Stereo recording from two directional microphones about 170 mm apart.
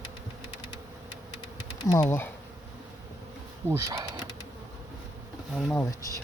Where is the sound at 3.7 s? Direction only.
20° right (ahead or behind).